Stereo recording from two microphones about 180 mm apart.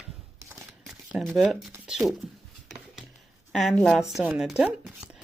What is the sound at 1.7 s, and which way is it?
Speech, 5° right (ahead or behind).